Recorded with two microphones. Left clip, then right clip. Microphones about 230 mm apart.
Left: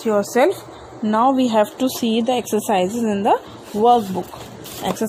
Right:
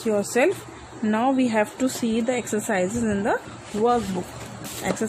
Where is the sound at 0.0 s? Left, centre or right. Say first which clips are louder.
Left 5 dB; centre.